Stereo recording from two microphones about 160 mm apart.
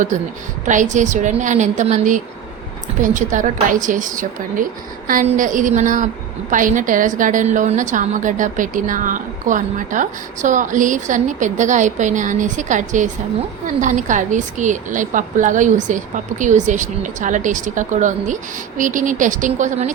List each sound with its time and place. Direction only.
0.6 s a woman's voice: 50° right (ahead or behind)